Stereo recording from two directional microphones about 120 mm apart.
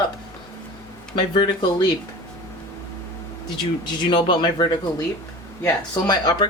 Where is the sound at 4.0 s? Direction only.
40° left (ahead or behind).